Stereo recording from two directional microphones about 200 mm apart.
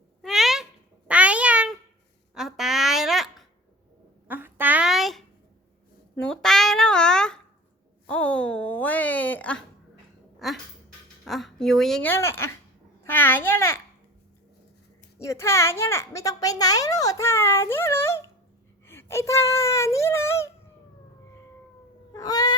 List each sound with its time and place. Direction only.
0.2 s meow: centre (ahead or behind)
2.3 s a sound: centre (ahead or behind)
13.1 s a woman's voice: 10° left (ahead or behind)
15.2 s a woman's voice: 15° left (ahead or behind)
18.9 s a sound: 10° left (ahead or behind)
22.1 s cat: 20° left (ahead or behind)